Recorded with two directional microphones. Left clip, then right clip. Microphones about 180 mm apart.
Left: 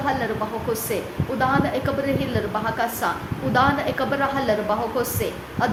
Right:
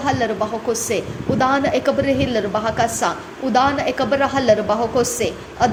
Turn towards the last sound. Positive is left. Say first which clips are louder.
# right 5 dB
turn(degrees=-25)  # may be behind; listen again after turning